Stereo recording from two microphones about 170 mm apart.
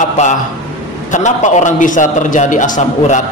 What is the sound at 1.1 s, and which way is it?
A man's voice, 45° left (ahead or behind).